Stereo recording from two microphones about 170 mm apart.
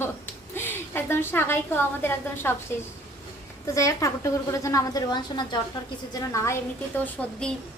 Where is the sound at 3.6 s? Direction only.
20° left (ahead or behind).